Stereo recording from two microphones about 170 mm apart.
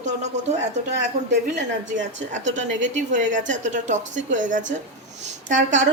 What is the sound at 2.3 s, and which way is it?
A woman's voice, 45° right (ahead or behind).